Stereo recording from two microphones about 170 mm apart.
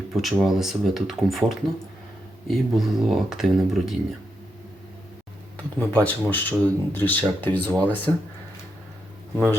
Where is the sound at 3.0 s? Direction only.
Centre (ahead or behind).